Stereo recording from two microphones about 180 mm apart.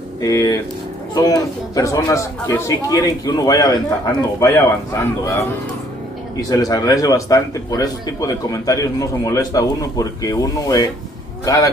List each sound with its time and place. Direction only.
0.2 s a man's voice: 20° left (ahead or behind)
6.5 s a man's voice: 20° left (ahead or behind)